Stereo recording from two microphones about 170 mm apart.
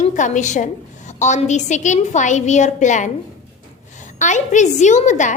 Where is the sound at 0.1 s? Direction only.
45° left (ahead or behind).